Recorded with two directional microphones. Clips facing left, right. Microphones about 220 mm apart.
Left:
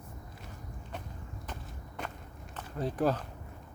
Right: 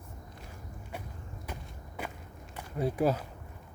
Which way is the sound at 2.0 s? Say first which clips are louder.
Right 1 dB; 5° right (ahead or behind).